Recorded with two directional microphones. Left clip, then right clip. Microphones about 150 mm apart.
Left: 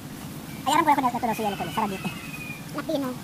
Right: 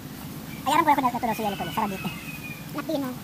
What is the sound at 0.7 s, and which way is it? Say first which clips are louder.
Speech: even; 10° right (ahead or behind).